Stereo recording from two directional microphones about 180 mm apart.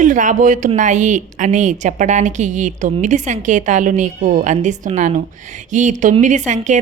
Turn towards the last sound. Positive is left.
turn(degrees=-40)  # may be behind; listen again after turning